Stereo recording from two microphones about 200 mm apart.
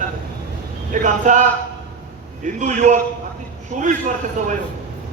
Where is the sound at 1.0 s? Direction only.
40° right (ahead or behind).